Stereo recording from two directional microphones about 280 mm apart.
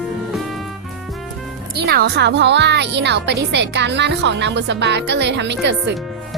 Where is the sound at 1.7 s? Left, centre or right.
Right.